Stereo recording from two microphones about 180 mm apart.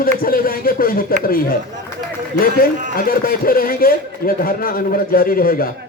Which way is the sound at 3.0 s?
55° left (ahead or behind).